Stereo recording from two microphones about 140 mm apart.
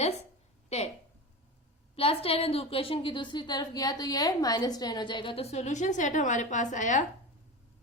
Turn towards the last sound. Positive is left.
turn(degrees=65)  # may be behind; listen again after turning